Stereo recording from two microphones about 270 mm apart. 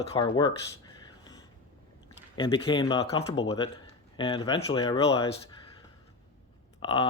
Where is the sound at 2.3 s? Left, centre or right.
Centre.